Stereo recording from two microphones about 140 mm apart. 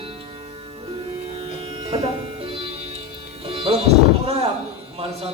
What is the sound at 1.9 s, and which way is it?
Music, 40° right (ahead or behind).